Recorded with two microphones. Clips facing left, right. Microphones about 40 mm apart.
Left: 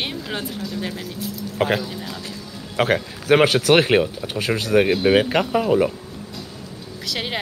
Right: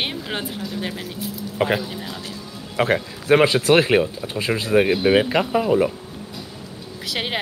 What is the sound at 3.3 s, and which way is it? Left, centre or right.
Speech, left.